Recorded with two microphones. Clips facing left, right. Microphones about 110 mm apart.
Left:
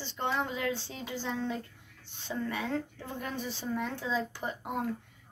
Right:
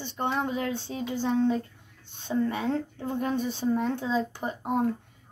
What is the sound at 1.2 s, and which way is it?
A woman's voice, 20° right (ahead or behind).